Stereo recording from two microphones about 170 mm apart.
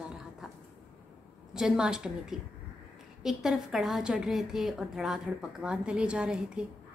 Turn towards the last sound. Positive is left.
turn(degrees=-5)  # may be behind; listen again after turning